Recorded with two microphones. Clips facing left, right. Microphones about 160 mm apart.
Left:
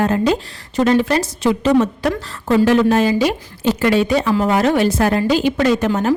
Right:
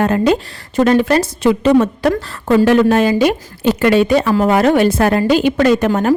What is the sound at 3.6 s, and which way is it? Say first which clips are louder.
A woman's voice: right 3 dB; 60° right (ahead or behind).